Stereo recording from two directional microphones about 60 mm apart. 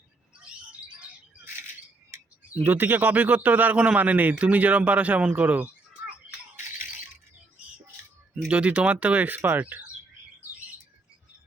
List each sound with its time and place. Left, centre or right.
0.3 s bird: centre
2.6 s a man's voice: right
6.6 s rattle: right
8.4 s a man's voice: right